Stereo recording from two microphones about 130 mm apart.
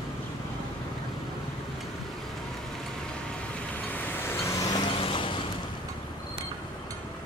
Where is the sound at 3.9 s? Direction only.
15° left (ahead or behind).